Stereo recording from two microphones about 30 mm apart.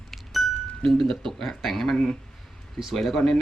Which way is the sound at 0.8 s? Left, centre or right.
Centre.